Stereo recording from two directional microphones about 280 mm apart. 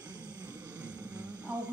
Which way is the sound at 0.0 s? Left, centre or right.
Centre.